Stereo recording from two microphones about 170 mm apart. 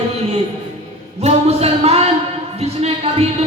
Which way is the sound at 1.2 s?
35° right (ahead or behind).